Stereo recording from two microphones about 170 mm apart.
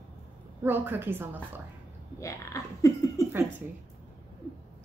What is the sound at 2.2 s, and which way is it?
Speech, 20° left (ahead or behind).